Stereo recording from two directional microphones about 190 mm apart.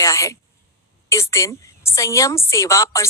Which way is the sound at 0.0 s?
15° left (ahead or behind).